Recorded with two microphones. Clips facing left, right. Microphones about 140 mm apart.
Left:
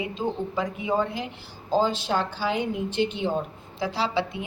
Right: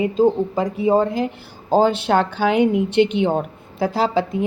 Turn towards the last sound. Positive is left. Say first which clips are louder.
# right 7 dB
turn(degrees=-45)  # may be behind; listen again after turning